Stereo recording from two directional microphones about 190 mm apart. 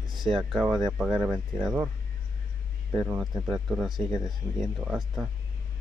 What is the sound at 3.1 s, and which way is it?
Speech, 10° right (ahead or behind).